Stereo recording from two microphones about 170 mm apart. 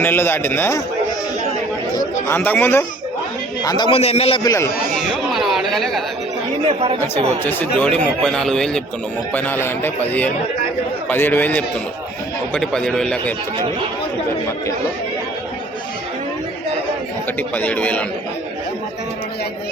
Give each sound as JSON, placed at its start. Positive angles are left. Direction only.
{"t": 0.0, "sound": "a man's voice", "side_deg": 10}
{"t": 2.0, "sound": "speech", "side_deg": 15}
{"t": 3.6, "sound": "a man's voice", "side_deg": 25}
{"t": 4.4, "sound": "a man's voice", "side_deg": 15}
{"t": 4.9, "sound": "chatter", "side_deg": 0}
{"t": 6.8, "sound": "speech", "side_deg": -35}
{"t": 7.4, "sound": "a man's voice", "side_deg": 10}
{"t": 17.5, "sound": "a man's voice", "side_deg": 10}